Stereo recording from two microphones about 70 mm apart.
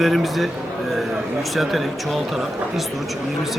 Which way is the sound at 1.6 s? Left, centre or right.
Centre.